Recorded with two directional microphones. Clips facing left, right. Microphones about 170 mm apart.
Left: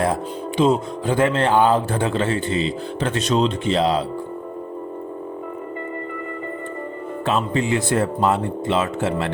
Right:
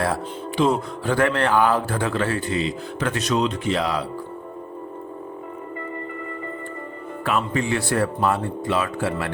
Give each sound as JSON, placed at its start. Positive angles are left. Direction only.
{"t": 0.0, "sound": "speech", "side_deg": 20}
{"t": 7.3, "sound": "speech", "side_deg": 25}